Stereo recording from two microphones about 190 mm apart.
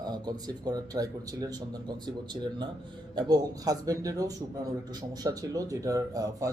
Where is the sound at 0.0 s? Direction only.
20° right (ahead or behind).